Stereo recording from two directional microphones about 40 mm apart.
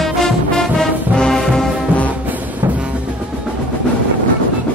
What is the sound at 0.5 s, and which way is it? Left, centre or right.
Music, centre.